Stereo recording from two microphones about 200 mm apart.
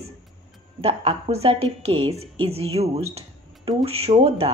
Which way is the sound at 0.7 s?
30° right (ahead or behind).